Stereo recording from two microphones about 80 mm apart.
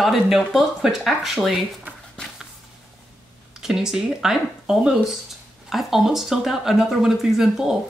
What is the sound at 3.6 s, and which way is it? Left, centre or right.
Speech, centre.